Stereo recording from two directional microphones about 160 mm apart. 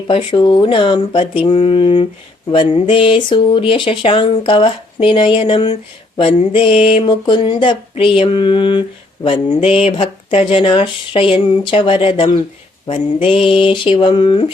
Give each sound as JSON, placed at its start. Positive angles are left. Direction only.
{"t": 0.1, "sound": "speech", "side_deg": 30}